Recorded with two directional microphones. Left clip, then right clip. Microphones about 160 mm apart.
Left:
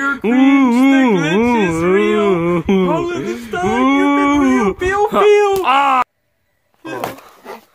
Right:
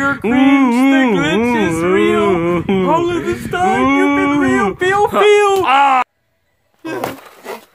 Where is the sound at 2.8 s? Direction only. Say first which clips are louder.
Right 3 dB; 30° right (ahead or behind).